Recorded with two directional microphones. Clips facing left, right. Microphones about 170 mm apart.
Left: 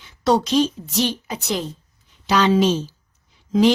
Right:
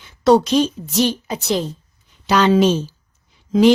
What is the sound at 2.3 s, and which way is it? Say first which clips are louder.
Speech: right 3 dB; 55° right (ahead or behind).